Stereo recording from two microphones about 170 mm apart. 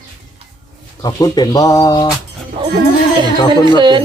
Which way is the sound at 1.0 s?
25° left (ahead or behind).